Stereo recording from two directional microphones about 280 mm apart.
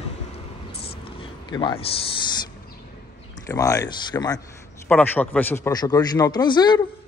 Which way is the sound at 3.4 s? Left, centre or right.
Centre.